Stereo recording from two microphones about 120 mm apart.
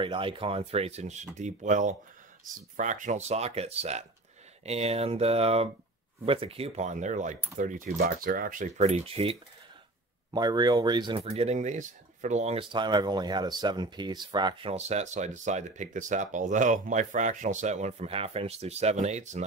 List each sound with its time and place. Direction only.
0.0 s speech: 45° right (ahead or behind); by 1.2 s 65° right (ahead or behind)
1.4 s speech: 90° right; by 6.9 s 55° right (ahead or behind)
6.9 s speech: 90° right; by 9.4 s 50° right (ahead or behind)
10.3 s speech: 35° right (ahead or behind)
11.2 s speech: 65° right (ahead or behind)
12.5 s speech: 40° right (ahead or behind)
14.7 s speech: 65° right (ahead or behind)
18.1 s speech: 55° right (ahead or behind); by 19.4 s 70° right (ahead or behind)